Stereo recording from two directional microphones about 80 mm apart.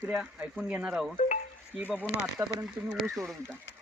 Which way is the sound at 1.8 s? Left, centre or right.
Left.